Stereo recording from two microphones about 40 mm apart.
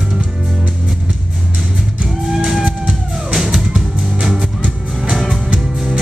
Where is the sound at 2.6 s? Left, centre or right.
Centre.